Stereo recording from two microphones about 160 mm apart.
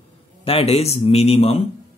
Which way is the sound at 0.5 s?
40° left (ahead or behind).